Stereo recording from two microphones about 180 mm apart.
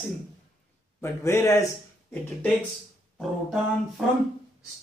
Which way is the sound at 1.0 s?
15° left (ahead or behind).